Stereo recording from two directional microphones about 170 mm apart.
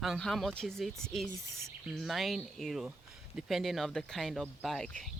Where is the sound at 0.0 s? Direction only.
Centre (ahead or behind).